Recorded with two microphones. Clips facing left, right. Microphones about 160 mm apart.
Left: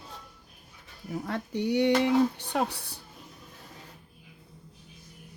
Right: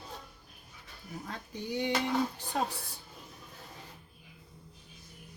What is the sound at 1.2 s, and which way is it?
Speech, 70° left (ahead or behind).